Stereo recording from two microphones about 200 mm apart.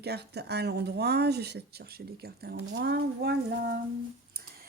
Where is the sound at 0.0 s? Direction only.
55° right (ahead or behind).